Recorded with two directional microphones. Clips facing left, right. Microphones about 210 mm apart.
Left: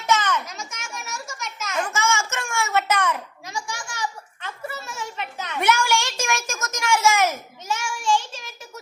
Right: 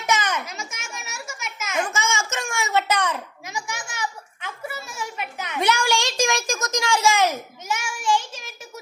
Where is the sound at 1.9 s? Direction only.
20° right (ahead or behind).